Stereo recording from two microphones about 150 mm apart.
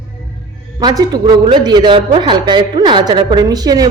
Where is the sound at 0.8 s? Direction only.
25° right (ahead or behind).